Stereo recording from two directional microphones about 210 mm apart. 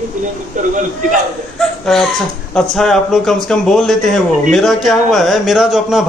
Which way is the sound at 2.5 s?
5° left (ahead or behind).